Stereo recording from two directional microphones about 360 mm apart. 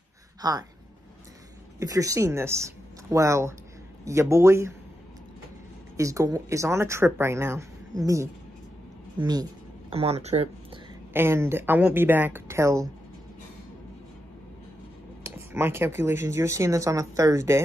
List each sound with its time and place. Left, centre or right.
0.4 s speech: centre
1.8 s a woman's voice: centre
5.9 s a woman's voice: centre
15.3 s a woman's voice: centre